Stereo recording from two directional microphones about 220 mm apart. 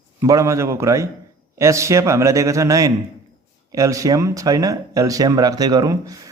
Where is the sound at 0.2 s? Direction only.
15° right (ahead or behind).